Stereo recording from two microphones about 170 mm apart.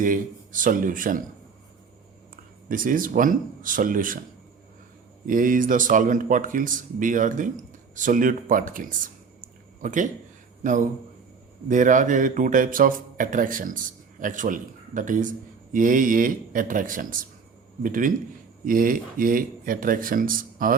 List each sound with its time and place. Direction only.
0.0 s speech: 50° right (ahead or behind)
2.6 s speech: 55° right (ahead or behind)
5.2 s speech: 50° right (ahead or behind)
9.4 s a sound: 50° right (ahead or behind)
10.6 s speech: 45° right (ahead or behind)